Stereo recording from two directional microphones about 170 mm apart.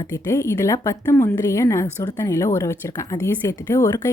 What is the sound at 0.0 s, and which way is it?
A woman's voice, 15° left (ahead or behind).